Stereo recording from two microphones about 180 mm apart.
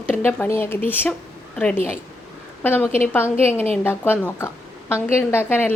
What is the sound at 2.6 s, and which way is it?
A woman's voice, 10° left (ahead or behind).